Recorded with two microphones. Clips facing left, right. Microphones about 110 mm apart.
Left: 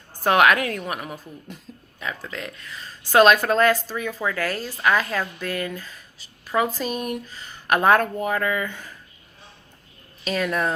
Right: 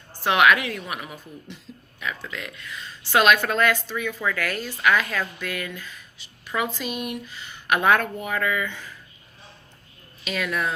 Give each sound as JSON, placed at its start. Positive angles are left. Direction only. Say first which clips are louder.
{"t": 0.2, "sound": "speech", "louder": "left 1 dB", "side_deg": 40}
{"t": 10.2, "sound": "speech", "louder": "left 3 dB", "side_deg": 35}